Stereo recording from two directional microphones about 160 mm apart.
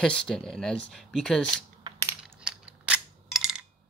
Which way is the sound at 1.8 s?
20° right (ahead or behind).